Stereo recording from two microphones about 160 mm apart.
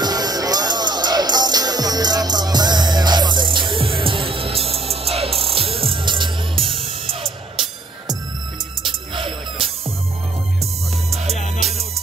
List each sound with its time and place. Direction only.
0.0 s music: 25° right (ahead or behind)
8.8 s music: 30° right (ahead or behind)